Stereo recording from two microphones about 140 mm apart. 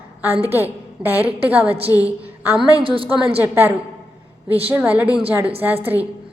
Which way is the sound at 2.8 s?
40° right (ahead or behind).